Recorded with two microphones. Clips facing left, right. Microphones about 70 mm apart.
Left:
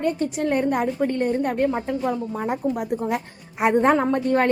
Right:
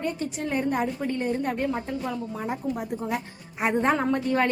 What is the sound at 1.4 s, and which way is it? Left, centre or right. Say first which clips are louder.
A woman's voice: left 5 dB; left.